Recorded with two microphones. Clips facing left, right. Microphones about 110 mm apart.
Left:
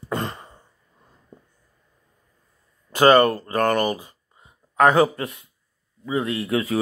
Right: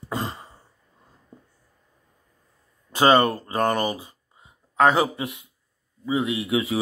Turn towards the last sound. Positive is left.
turn(degrees=0)  # may be behind; listen again after turning